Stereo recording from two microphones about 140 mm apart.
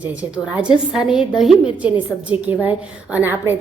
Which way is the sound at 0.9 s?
5° right (ahead or behind).